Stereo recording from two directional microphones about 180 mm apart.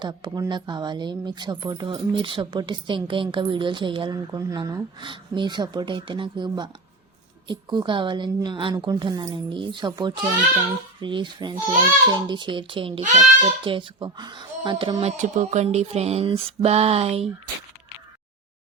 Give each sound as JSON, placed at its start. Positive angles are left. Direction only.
{"t": 0.0, "sound": "speech", "side_deg": -25}
{"t": 13.0, "sound": "a child's voice", "side_deg": -45}
{"t": 13.7, "sound": "speech", "side_deg": -25}
{"t": 15.0, "sound": "a sound", "side_deg": -40}